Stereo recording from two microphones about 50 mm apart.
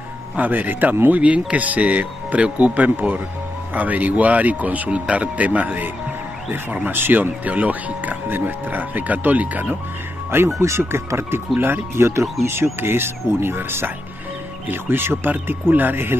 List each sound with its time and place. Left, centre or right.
0.4 s speech: right
7.4 s speech: right
10.3 s speech: right
11.9 s speech: right